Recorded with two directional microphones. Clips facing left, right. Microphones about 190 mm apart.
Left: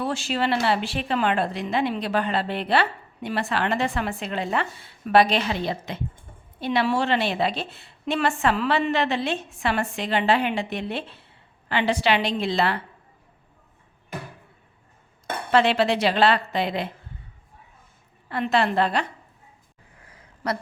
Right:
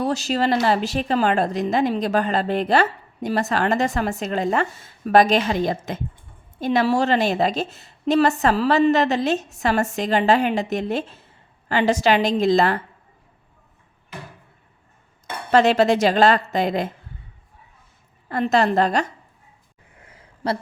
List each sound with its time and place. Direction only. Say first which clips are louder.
0.0 s a woman's voice: right 4 dB; 40° right (ahead or behind)
15.5 s a woman's voice: right 4 dB; 45° right (ahead or behind)
18.3 s a woman's voice: right 4 dB; 40° right (ahead or behind)
20.1 s a sound: right 3 dB; 30° right (ahead or behind)